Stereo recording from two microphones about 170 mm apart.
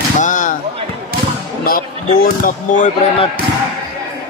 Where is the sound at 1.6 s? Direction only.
60° left (ahead or behind).